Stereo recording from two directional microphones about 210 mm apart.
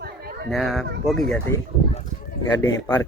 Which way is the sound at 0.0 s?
45° right (ahead or behind).